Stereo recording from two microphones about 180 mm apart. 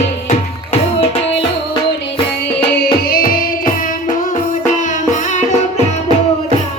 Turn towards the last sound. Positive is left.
turn(degrees=35)  # may be behind; listen again after turning